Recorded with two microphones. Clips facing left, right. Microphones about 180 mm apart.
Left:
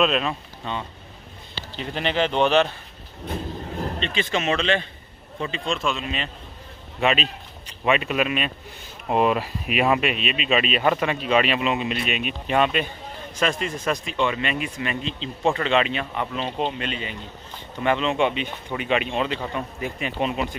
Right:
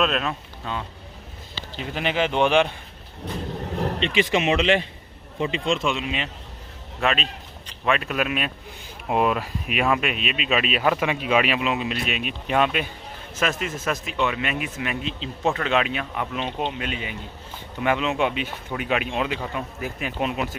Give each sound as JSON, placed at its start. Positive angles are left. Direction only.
{"t": 0.0, "sound": "a man's voice", "side_deg": 0}
{"t": 4.0, "sound": "a man's voice", "side_deg": -20}
{"t": 7.0, "sound": "a man's voice", "side_deg": 5}